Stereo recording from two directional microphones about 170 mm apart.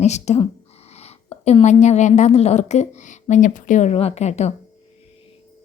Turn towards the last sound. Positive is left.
turn(degrees=40)  # may be behind; listen again after turning